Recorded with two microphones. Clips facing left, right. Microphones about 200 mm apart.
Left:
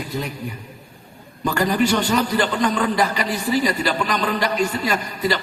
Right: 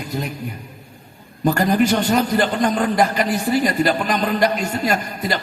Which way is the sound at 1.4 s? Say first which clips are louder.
Right 3 dB; 45° right (ahead or behind).